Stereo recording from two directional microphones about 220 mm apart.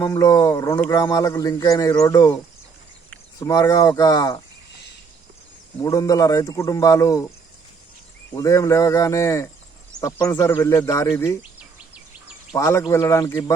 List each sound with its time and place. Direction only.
0.0 s speech: 15° left (ahead or behind)
3.4 s speech: 15° left (ahead or behind)
5.8 s speech: 15° left (ahead or behind)
8.4 s speech: 15° left (ahead or behind)
12.5 s speech: 10° left (ahead or behind)